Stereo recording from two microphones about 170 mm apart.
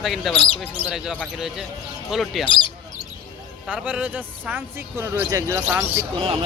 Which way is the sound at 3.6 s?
5° right (ahead or behind).